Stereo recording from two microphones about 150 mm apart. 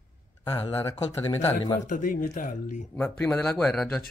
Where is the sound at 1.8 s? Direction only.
60° left (ahead or behind).